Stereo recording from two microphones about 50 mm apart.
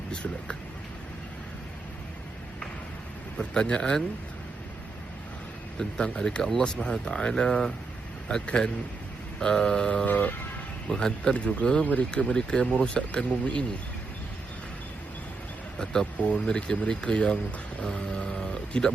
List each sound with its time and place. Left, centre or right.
0.1 s speech: centre
3.3 s speech: centre
5.8 s speech: centre
10.1 s vehicle: left
10.8 s speech: centre
15.8 s speech: centre